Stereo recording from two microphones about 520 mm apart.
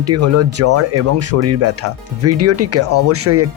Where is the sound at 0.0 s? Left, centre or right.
Right.